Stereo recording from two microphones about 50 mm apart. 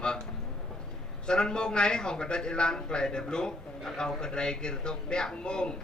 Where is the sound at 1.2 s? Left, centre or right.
Centre.